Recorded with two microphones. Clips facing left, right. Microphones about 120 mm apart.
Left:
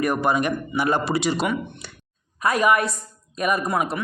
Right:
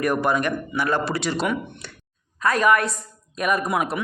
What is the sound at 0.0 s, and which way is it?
A woman's voice, centre (ahead or behind).